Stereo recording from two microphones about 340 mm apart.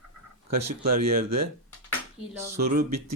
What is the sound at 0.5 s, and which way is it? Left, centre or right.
Speech, right.